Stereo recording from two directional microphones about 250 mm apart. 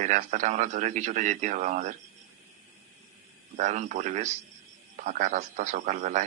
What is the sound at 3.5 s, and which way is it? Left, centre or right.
A man's voice, right.